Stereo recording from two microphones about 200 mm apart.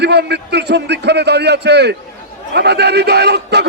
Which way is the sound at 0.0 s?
55° right (ahead or behind).